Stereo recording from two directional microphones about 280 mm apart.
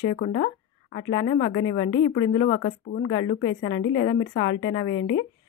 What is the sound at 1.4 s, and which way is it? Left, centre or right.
Speech, left.